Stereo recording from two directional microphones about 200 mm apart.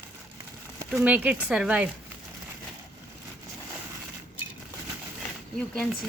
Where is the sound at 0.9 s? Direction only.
5° right (ahead or behind).